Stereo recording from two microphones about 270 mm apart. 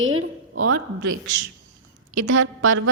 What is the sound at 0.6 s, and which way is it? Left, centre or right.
Speech, right.